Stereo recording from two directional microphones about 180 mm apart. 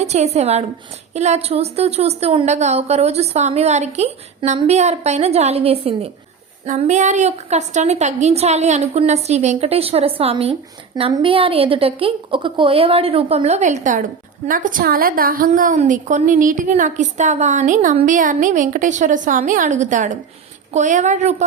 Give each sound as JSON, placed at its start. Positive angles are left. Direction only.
{"t": 0.0, "sound": "a woman's voice", "side_deg": -35}